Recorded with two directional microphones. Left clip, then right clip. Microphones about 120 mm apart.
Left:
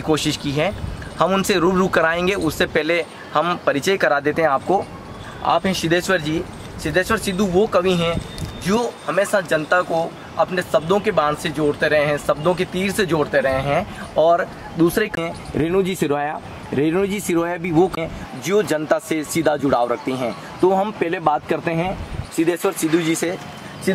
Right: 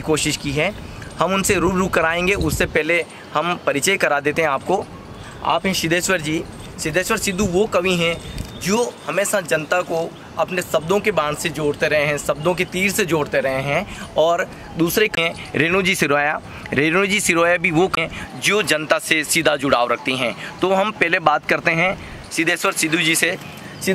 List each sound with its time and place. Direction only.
0.0 s speech: 10° right (ahead or behind)
15.5 s speech: 35° right (ahead or behind)